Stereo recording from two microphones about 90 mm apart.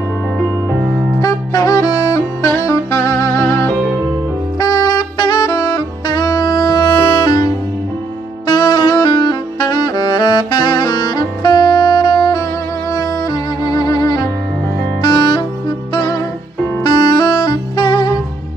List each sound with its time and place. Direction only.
1.2 s saxophone: 40° left (ahead or behind)
4.6 s saxophone: 50° left (ahead or behind)
8.5 s music: 55° left (ahead or behind)
9.0 s saxophone: 55° left (ahead or behind)
13.3 s music: 45° left (ahead or behind)
16.8 s saxophone: 60° left (ahead or behind)